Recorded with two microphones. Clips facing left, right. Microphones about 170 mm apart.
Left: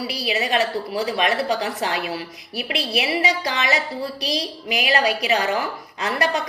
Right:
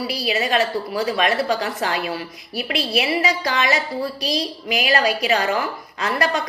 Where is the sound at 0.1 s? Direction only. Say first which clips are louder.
Right 1 dB; 35° right (ahead or behind).